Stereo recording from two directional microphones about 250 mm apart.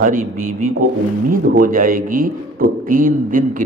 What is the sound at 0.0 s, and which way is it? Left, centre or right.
A man's voice, right.